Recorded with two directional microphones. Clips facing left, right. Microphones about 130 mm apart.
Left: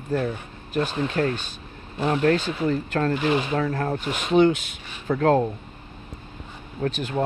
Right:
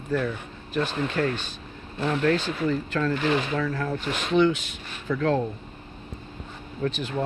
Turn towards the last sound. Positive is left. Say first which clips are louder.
# left 1 dB
turn(degrees=45)  # may be behind; listen again after turning